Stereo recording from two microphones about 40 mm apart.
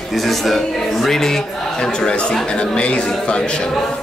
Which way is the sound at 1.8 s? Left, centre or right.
Left.